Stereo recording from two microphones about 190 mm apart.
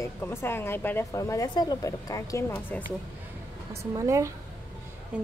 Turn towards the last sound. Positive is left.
turn(degrees=-15)  # may be behind; listen again after turning